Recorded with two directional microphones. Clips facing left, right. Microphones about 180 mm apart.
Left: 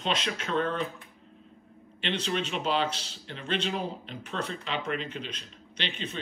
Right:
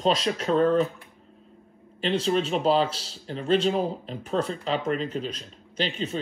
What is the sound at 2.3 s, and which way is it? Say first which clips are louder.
A man's voice: right 7 dB; 40° right (ahead or behind).